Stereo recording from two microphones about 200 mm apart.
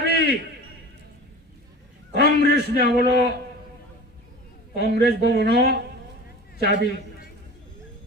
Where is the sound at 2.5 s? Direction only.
55° right (ahead or behind).